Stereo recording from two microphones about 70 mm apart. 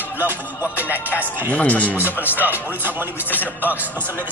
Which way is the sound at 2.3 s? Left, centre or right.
Right.